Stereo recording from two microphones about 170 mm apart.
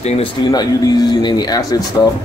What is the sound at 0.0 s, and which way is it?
Speech, 30° left (ahead or behind).